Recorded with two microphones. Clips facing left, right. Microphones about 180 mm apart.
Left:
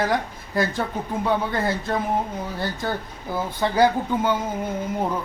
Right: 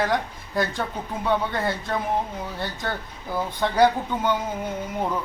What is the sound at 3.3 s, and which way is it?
Speech, 5° left (ahead or behind).